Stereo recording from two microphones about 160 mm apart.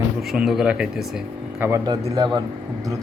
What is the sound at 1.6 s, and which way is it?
Speech, 20° right (ahead or behind).